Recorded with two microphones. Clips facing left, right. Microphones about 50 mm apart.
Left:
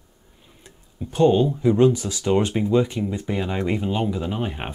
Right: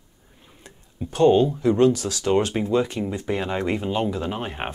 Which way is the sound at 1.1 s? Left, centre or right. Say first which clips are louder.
Right 1 dB; centre.